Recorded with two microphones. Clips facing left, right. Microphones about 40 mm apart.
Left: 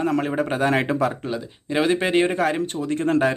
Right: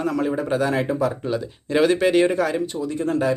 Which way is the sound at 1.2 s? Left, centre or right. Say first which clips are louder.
Right 3 dB; centre.